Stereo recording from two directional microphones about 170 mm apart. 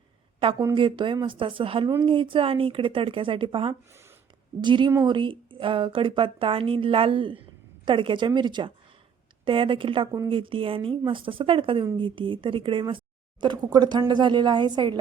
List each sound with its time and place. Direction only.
0.7 s a woman's voice: 30° right (ahead or behind)